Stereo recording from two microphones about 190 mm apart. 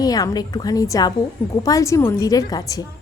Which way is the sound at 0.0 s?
20° left (ahead or behind).